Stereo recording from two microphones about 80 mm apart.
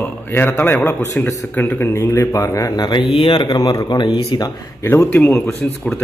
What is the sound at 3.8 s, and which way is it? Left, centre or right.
Speech, left.